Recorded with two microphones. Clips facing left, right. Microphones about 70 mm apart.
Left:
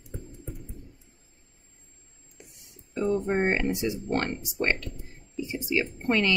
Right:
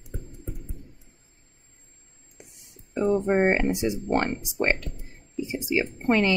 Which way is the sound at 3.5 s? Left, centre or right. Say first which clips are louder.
Right 3 dB; right.